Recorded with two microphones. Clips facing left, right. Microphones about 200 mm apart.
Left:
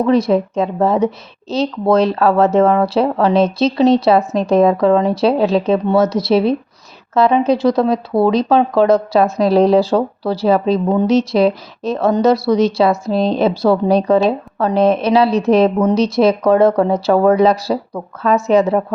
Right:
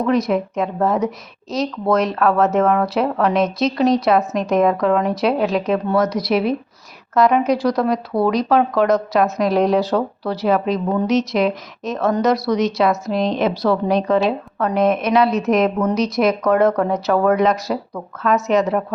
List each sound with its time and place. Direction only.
0.0 s speech: 30° left (ahead or behind)